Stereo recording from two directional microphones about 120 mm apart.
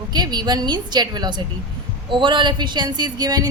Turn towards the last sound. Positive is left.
turn(degrees=-30)  # may be behind; listen again after turning